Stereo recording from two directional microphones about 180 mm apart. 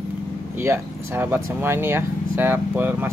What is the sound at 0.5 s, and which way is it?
Speech, 15° right (ahead or behind).